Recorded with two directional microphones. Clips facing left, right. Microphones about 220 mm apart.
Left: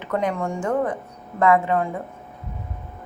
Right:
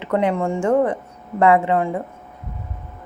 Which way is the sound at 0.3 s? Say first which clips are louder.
Right 5 dB; 25° right (ahead or behind).